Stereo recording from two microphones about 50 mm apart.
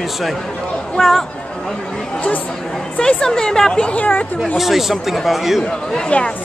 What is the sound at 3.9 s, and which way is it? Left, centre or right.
Speech, left.